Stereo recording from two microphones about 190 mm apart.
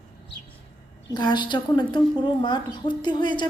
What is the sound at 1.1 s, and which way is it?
A woman's voice, 20° left (ahead or behind).